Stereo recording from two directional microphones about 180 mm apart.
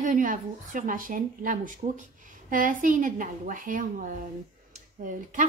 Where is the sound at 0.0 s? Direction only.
45° right (ahead or behind).